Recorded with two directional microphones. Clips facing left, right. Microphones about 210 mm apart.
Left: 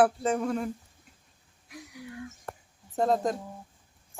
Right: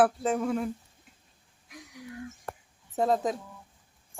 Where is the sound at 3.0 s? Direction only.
5° right (ahead or behind).